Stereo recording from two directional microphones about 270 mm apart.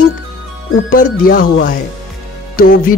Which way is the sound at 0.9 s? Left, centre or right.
Left.